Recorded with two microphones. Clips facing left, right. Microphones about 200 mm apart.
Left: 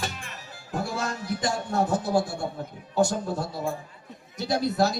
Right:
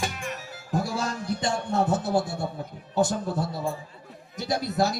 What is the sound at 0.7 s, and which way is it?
Speech, 35° right (ahead or behind).